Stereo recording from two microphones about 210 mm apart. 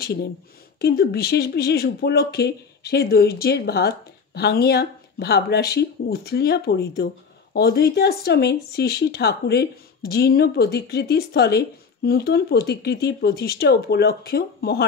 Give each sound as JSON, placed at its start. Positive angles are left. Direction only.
{"t": 0.7, "sound": "speech", "side_deg": 50}